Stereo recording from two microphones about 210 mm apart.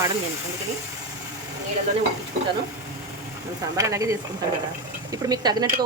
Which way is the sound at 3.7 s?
15° right (ahead or behind).